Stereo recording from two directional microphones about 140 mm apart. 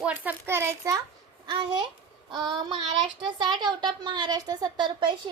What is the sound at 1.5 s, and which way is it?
A woman's voice, 30° right (ahead or behind).